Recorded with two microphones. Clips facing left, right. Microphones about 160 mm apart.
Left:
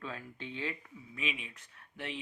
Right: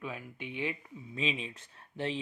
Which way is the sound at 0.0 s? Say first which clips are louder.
Right 2 dB; 15° right (ahead or behind).